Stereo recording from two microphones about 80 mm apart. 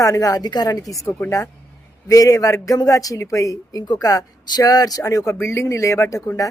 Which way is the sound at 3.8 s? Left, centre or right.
Left.